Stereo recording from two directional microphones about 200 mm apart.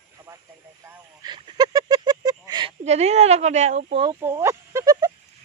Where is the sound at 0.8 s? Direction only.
20° right (ahead or behind).